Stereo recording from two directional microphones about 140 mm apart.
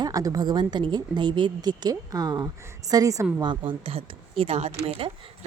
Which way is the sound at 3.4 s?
35° right (ahead or behind).